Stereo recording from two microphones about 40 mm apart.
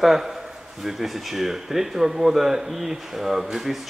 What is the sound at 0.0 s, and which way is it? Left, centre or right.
Speech, centre.